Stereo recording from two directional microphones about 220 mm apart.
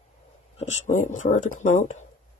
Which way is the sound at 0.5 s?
30° left (ahead or behind).